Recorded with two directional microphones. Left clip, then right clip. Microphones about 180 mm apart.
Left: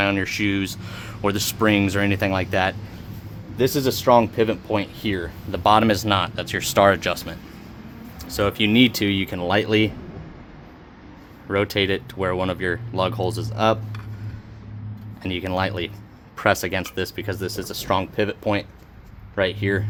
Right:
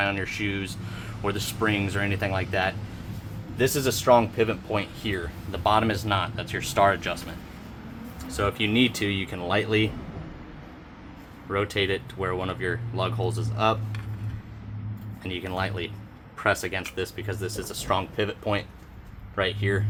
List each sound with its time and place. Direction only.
0.0 s speech: 60° left (ahead or behind)
3.6 s speech: 35° left (ahead or behind)
5.6 s speech: 60° left (ahead or behind)
11.4 s speech: 55° left (ahead or behind)
15.2 s speech: 55° left (ahead or behind)